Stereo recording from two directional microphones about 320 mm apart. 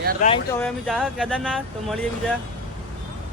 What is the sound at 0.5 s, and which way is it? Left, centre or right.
A man's voice, centre.